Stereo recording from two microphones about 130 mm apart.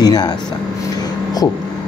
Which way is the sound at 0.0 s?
30° left (ahead or behind).